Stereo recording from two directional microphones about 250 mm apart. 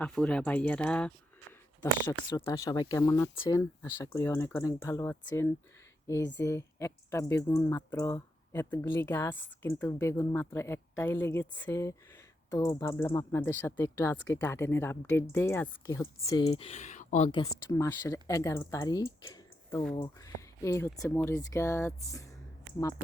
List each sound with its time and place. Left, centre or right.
0.0 s speech: centre; by 17.4 s left
17.4 s speech: centre